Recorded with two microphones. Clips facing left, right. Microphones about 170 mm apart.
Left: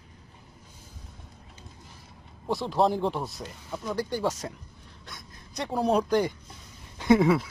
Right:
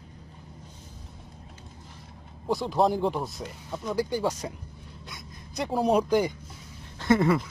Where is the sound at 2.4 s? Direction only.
Centre (ahead or behind).